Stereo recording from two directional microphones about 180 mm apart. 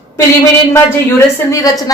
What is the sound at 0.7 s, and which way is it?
Speech, 15° left (ahead or behind).